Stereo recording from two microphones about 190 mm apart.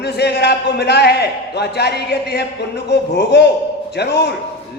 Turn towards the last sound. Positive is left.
turn(degrees=60)  # may be behind; listen again after turning